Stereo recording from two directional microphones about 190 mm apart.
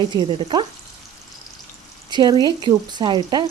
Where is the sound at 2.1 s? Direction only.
20° right (ahead or behind).